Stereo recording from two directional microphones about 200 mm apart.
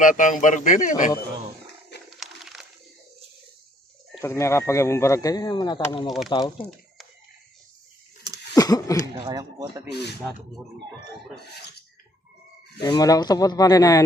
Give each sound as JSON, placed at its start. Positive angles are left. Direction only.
{"t": 0.0, "sound": "a man's voice", "side_deg": 40}
{"t": 2.1, "sound": "a sound", "side_deg": 0}
{"t": 4.2, "sound": "speech", "side_deg": 15}
{"t": 6.4, "sound": "speech", "side_deg": 0}
{"t": 8.5, "sound": "speech", "side_deg": 15}
{"t": 9.2, "sound": "speech", "side_deg": -20}
{"t": 9.9, "sound": "speech", "side_deg": 55}
{"t": 12.8, "sound": "speech", "side_deg": 20}